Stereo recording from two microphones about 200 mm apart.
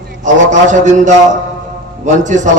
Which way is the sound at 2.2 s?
40° right (ahead or behind).